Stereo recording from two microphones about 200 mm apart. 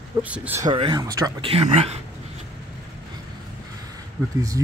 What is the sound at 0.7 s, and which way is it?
Speech, 20° right (ahead or behind).